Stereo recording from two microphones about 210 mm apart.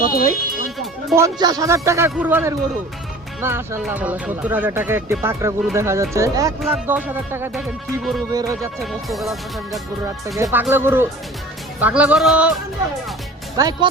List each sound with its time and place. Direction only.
0.0 s speech: 45° left (ahead or behind)
1.1 s speech: 15° right (ahead or behind); by 8.2 s centre (ahead or behind)
8.3 s speech: 15° right (ahead or behind)
8.8 s speech: centre (ahead or behind)
13.6 s speech: 20° right (ahead or behind)